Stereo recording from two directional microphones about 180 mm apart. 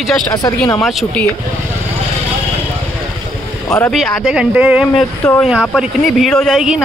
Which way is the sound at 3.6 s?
10° left (ahead or behind).